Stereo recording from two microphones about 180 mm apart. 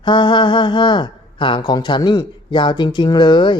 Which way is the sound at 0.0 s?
25° left (ahead or behind).